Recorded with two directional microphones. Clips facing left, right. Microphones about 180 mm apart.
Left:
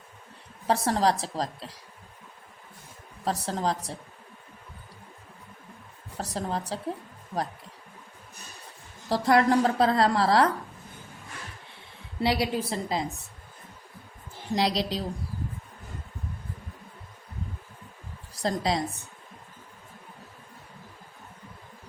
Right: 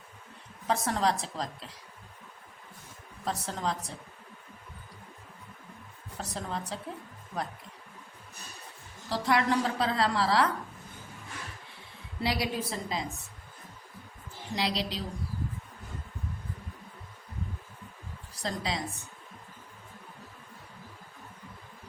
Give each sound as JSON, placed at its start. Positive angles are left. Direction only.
{"t": 0.7, "sound": "a woman's voice", "side_deg": 35}
{"t": 3.2, "sound": "a woman's voice", "side_deg": 35}
{"t": 6.1, "sound": "a woman's voice", "side_deg": 35}
{"t": 9.0, "sound": "a woman's voice", "side_deg": 40}
{"t": 12.2, "sound": "a woman's voice", "side_deg": 30}
{"t": 14.5, "sound": "a woman's voice", "side_deg": 40}
{"t": 18.4, "sound": "a woman's voice", "side_deg": 40}